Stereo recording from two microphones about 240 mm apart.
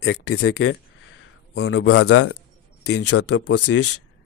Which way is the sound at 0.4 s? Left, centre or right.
Left.